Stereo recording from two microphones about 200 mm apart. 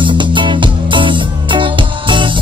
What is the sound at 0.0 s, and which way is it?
Music, 25° right (ahead or behind).